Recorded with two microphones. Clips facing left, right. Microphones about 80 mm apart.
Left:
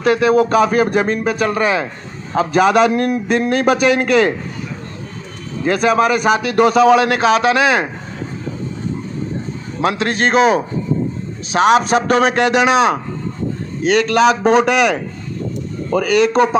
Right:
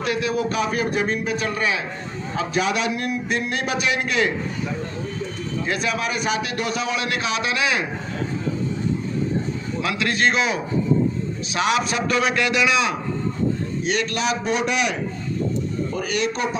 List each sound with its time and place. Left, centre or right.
0.0 s a man's voice: left
5.6 s a man's voice: left
9.8 s a man's voice: left
13.9 s a man's voice: left
14.5 s a man's voice: left
16.2 s a man's voice: left